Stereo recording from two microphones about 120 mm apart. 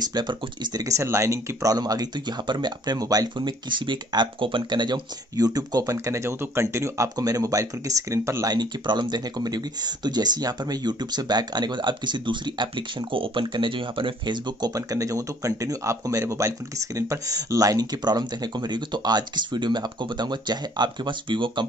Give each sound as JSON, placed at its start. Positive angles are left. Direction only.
{"t": 0.0, "sound": "speech", "side_deg": -35}